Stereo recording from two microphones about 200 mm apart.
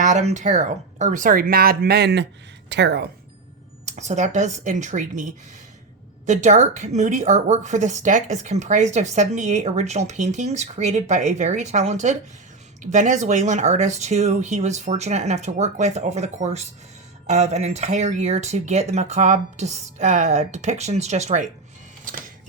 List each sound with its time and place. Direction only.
0.0 s a woman's voice: 35° right (ahead or behind); by 3.1 s 55° right (ahead or behind)
3.8 s a woman's voice: 35° right (ahead or behind)